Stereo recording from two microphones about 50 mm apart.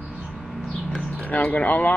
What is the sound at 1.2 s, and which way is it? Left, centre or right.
Speech, left.